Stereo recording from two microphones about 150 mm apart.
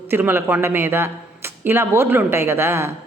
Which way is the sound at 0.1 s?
15° right (ahead or behind).